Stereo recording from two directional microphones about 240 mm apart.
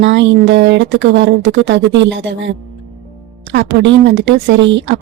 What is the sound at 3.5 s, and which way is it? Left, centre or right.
A woman's voice, right.